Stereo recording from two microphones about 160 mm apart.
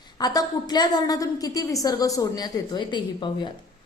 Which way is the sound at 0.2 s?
25° left (ahead or behind).